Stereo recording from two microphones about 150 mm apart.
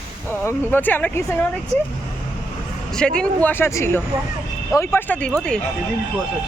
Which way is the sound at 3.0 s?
5° left (ahead or behind).